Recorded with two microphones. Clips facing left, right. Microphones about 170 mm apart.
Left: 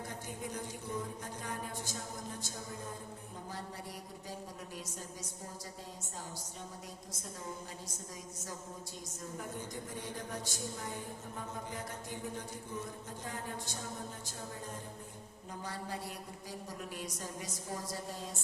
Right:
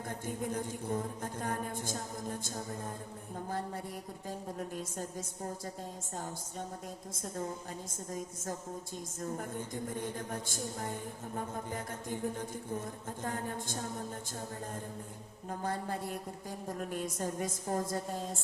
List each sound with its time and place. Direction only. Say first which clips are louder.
0.1 s a woman's voice: right 6 dB; 50° right (ahead or behind)
4.3 s a woman's voice: right 7 dB; 50° right (ahead or behind)
7.1 s a woman's voice: right 7 dB; 50° right (ahead or behind)
15.4 s a woman's voice: right 6 dB; 50° right (ahead or behind)